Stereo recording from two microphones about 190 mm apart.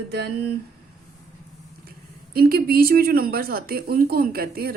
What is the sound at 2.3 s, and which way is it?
Speech, 50° right (ahead or behind).